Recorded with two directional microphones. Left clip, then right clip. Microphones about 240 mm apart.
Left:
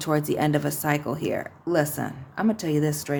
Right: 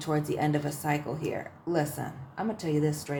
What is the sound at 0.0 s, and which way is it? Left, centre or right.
Speech, left.